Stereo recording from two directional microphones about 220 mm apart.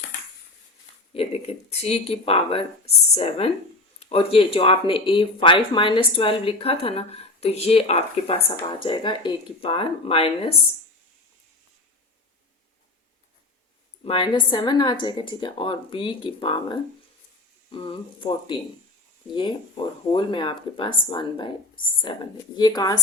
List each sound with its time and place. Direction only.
1.1 s speech: 25° left (ahead or behind)
14.0 s speech: 25° left (ahead or behind)